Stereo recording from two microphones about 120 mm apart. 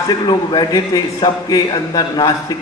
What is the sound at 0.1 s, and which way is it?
A man's voice, 35° left (ahead or behind).